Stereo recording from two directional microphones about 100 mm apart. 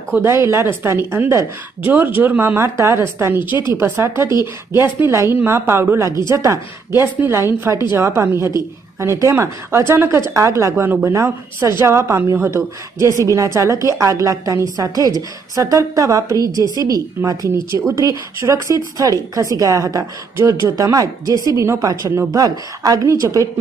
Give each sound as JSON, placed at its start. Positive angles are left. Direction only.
{"t": 0.1, "sound": "a woman's voice", "side_deg": -25}